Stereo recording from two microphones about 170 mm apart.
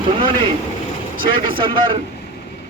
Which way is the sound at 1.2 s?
30° right (ahead or behind).